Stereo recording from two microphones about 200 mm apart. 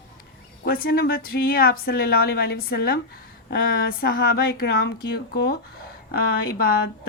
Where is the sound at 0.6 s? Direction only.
50° left (ahead or behind).